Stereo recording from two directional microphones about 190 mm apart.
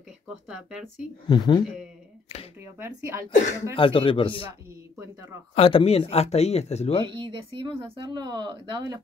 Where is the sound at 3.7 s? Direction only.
25° left (ahead or behind).